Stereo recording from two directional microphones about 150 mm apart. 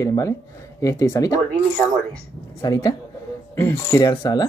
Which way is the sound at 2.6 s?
25° left (ahead or behind).